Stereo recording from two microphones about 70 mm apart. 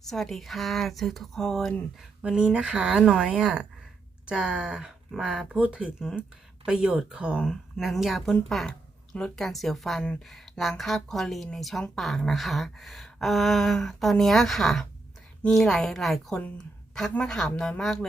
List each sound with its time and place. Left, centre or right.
0.0 s speech: centre
2.5 s a woman's voice: centre
7.4 s speech: centre
9.4 s speech: centre